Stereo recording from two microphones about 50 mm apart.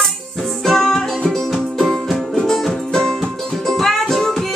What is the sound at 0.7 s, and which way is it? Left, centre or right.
Music, centre.